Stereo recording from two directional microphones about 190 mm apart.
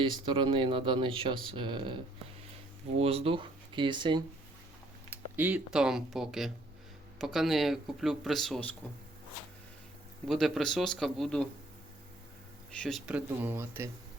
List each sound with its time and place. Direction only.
0.0 s speech: 25° right (ahead or behind)
3.0 s speech: 30° right (ahead or behind)
5.1 s a man's voice: 10° right (ahead or behind)
10.2 s a man's voice: centre (ahead or behind)
12.7 s speech: centre (ahead or behind); by 13.9 s 15° right (ahead or behind)